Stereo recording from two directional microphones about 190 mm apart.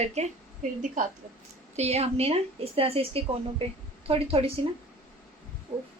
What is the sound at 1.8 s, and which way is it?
A woman's voice, 35° right (ahead or behind).